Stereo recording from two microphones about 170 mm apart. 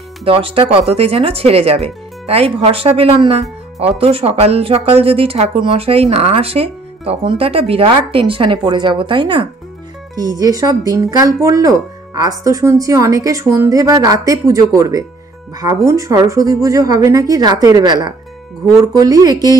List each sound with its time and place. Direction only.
0.2 s speech: 35° right (ahead or behind)